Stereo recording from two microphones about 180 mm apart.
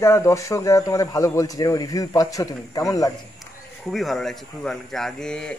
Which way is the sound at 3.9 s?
Centre (ahead or behind).